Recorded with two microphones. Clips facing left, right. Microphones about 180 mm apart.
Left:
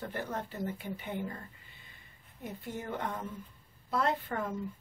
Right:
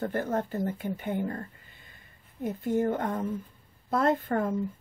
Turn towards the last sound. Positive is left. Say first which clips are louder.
# right 7 dB
turn(degrees=-50)  # may be behind; listen again after turning